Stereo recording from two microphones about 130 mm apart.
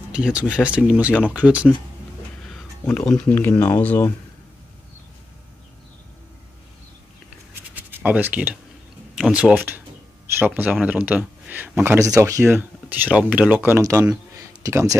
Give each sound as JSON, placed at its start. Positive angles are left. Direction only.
{"t": 0.1, "sound": "speech", "side_deg": -10}
{"t": 2.8, "sound": "speech", "side_deg": 20}
{"t": 3.1, "sound": "speech", "side_deg": 10}
{"t": 7.7, "sound": "a sound", "side_deg": -15}
{"t": 9.1, "sound": "speech", "side_deg": -5}